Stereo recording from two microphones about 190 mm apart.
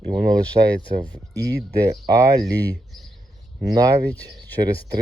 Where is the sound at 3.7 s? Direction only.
20° right (ahead or behind).